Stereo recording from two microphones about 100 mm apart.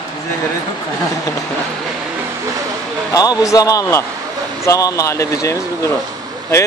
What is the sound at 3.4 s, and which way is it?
Speech, 35° left (ahead or behind).